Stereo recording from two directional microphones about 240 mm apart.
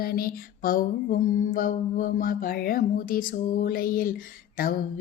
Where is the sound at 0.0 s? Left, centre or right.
Left.